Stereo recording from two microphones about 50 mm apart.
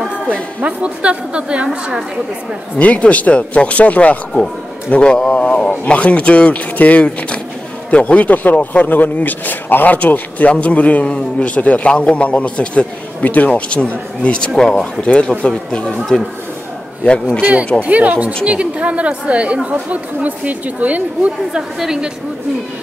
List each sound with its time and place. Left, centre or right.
0.7 s a woman's voice: right
2.8 s a man's voice: left
4.9 s a man's voice: centre
13.5 s a man's voice: left
14.6 s speech: centre
15.0 s a man's voice: left
17.7 s a woman's voice: right
21.7 s a woman's voice: centre